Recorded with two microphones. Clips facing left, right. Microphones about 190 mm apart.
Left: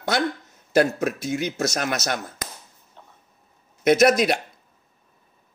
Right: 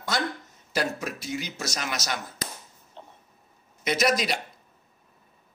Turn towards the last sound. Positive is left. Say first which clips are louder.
# left 8 dB
turn(degrees=55)  # may be behind; listen again after turning